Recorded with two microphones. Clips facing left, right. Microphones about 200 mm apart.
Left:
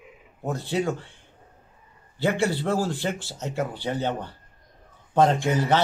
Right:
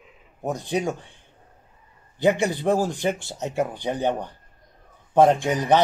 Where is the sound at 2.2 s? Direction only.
15° right (ahead or behind).